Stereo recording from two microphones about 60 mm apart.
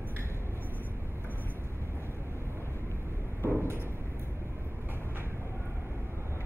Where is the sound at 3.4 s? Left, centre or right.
Right.